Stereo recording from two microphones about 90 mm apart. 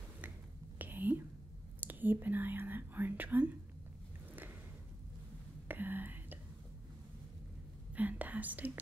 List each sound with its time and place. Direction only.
0.7 s whispering: 20° right (ahead or behind)
1.8 s speech: 20° right (ahead or behind)
5.7 s whispering: 20° right (ahead or behind)
7.9 s whispering: 20° right (ahead or behind)